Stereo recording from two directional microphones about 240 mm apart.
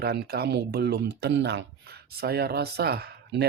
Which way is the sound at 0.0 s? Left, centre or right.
Right.